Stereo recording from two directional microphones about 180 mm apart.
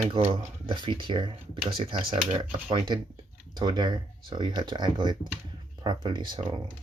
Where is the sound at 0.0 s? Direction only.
30° right (ahead or behind).